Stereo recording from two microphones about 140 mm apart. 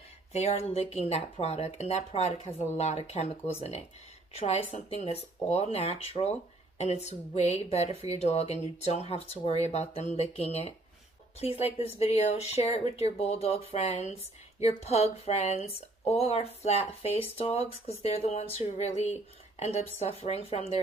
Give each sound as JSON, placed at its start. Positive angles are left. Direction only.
{"t": 0.3, "sound": "speech", "side_deg": 50}